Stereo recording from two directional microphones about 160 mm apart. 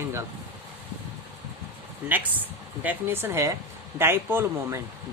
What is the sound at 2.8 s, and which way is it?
Speech, 10° right (ahead or behind).